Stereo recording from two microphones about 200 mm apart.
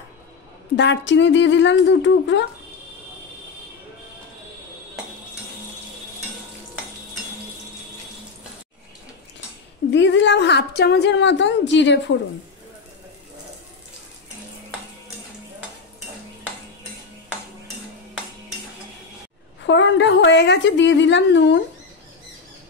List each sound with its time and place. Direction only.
0.7 s a woman's voice: 65° left (ahead or behind)
9.8 s a woman's voice: 65° left (ahead or behind)
19.6 s a woman's voice: 65° left (ahead or behind)